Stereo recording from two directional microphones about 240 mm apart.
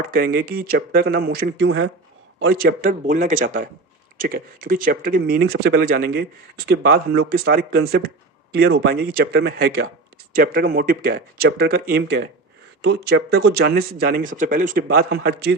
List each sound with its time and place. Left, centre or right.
0.1 s speech: right